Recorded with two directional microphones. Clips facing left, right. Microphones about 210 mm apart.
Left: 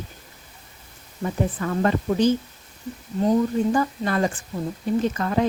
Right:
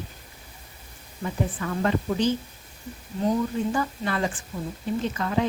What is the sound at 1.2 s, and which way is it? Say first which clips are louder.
Speech: left 4 dB; 45° left (ahead or behind).